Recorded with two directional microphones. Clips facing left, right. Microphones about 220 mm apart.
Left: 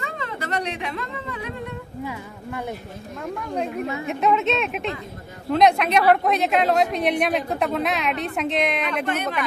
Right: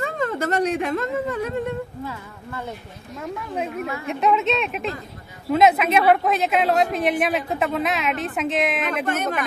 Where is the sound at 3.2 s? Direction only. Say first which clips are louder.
Left 1 dB; 5° right (ahead or behind).